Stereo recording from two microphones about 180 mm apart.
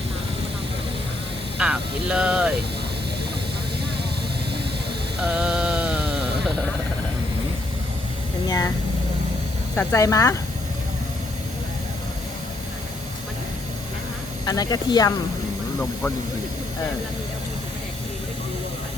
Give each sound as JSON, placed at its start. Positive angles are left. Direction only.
{"t": 1.5, "sound": "speech", "side_deg": -5}
{"t": 5.2, "sound": "mantra", "side_deg": -5}
{"t": 8.4, "sound": "speech", "side_deg": 20}
{"t": 9.7, "sound": "speech", "side_deg": 15}
{"t": 14.4, "sound": "speech", "side_deg": 20}